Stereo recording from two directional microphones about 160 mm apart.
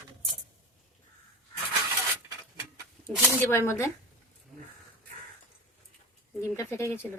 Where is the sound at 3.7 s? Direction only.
15° left (ahead or behind).